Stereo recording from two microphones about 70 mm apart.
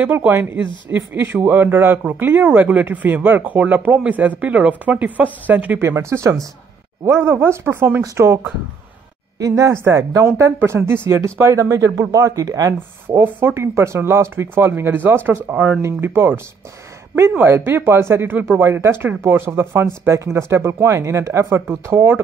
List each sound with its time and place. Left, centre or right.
0.0 s speech: right
5.8 s speech: right
8.0 s speech: right
9.4 s speech: right
10.2 s speech: right
13.2 s speech: right
15.5 s speech: centre
15.8 s speech: right
17.4 s speech: right
21.8 s speech: right